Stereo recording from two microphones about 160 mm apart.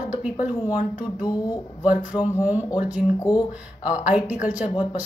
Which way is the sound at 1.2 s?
25° left (ahead or behind).